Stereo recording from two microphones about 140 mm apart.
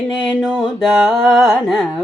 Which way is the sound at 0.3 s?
5° right (ahead or behind).